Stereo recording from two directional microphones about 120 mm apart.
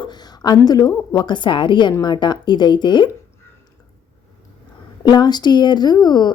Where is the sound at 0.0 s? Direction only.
35° left (ahead or behind).